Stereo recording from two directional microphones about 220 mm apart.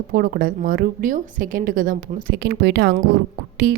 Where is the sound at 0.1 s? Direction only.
40° right (ahead or behind).